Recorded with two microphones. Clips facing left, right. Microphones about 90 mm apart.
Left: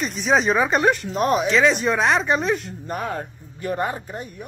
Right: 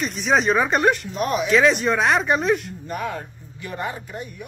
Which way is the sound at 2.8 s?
40° left (ahead or behind).